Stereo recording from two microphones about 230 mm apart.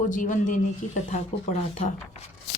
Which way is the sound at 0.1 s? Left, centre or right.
Left.